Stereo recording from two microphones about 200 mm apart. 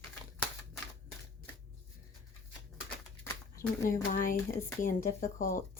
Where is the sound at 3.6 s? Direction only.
45° left (ahead or behind).